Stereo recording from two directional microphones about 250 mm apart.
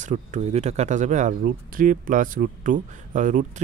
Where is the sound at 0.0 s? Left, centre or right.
Right.